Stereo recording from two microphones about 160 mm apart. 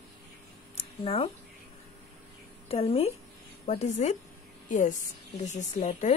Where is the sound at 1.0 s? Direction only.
35° left (ahead or behind).